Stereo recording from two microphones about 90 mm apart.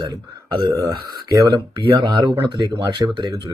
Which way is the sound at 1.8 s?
65° right (ahead or behind).